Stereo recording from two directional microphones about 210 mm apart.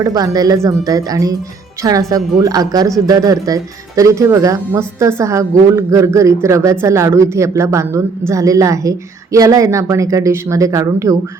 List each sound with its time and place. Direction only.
0.0 s speech: 15° right (ahead or behind)